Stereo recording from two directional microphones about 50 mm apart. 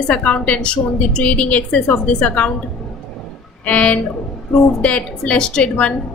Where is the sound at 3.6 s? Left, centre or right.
Left.